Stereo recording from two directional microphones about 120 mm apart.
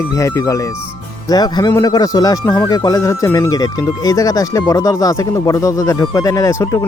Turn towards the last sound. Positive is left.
turn(degrees=25)  # may be behind; listen again after turning